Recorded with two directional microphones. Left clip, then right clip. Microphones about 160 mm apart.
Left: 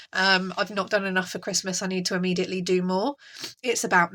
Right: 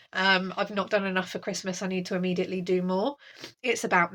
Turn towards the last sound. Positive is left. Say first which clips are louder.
# left 3 dB
turn(degrees=15)  # may be behind; listen again after turning